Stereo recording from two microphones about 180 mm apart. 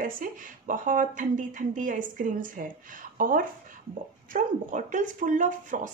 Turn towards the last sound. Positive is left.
turn(degrees=-45)  # may be behind; listen again after turning